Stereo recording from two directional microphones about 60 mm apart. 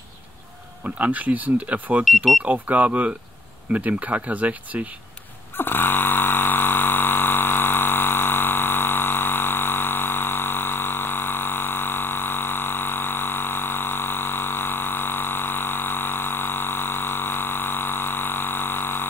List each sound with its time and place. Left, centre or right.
0.8 s speech: right
2.0 s speech: centre
2.4 s speech: right
5.6 s a sound: left